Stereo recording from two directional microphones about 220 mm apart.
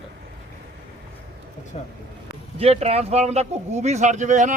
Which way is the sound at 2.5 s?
25° right (ahead or behind).